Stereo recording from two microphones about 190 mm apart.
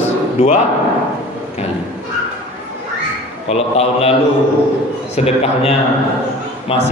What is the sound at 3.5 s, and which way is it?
Speech, 30° left (ahead or behind).